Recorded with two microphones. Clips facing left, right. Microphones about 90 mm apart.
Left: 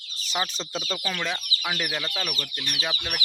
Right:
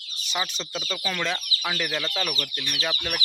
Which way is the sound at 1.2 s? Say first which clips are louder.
Right 2 dB; 15° left (ahead or behind).